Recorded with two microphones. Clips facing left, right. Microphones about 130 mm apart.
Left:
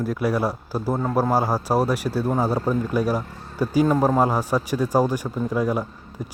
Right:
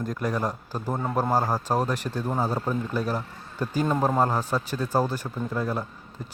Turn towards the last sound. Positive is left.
turn(degrees=10)  # may be behind; listen again after turning